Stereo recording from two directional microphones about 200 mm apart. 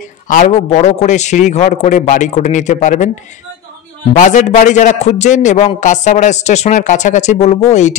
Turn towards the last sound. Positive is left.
turn(degrees=35)  # may be behind; listen again after turning